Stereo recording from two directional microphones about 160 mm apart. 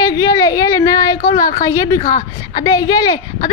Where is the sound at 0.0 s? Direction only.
25° left (ahead or behind).